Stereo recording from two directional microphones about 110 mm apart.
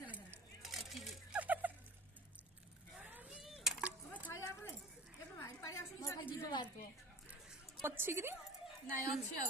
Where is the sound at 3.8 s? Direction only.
15° right (ahead or behind).